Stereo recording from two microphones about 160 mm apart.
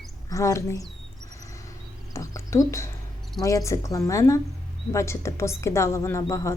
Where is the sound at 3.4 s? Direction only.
20° left (ahead or behind).